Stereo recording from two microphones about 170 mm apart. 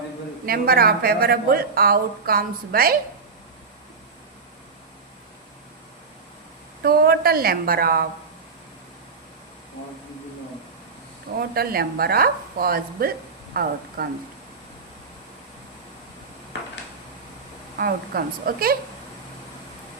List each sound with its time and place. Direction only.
0.4 s speech: 60° right (ahead or behind)
6.8 s a woman's voice: 65° right (ahead or behind)
11.3 s speech: 60° right (ahead or behind)
17.7 s speech: 60° right (ahead or behind)